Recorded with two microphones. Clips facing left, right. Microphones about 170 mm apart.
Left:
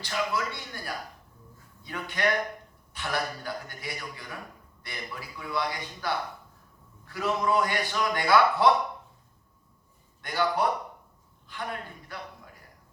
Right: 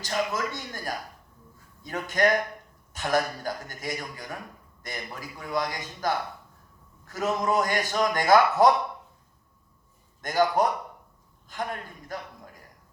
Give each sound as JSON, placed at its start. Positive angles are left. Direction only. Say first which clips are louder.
{"t": 0.0, "sound": "a man's voice", "louder": "right 2 dB", "side_deg": -45}
{"t": 10.2, "sound": "a man's voice", "louder": "right 4 dB", "side_deg": -45}